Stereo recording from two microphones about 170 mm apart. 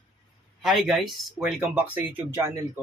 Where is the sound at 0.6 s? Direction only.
Centre (ahead or behind).